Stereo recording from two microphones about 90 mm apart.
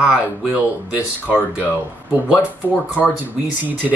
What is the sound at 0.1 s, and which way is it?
Speech, 15° right (ahead or behind).